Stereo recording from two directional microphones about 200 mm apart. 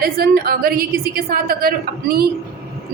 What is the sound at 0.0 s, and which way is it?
A woman's voice, 50° right (ahead or behind).